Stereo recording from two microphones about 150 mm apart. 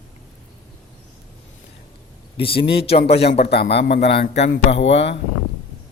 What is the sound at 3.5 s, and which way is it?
Speech, 90° left.